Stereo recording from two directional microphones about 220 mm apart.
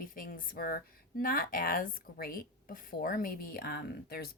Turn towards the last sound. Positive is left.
turn(degrees=45)  # may be behind; listen again after turning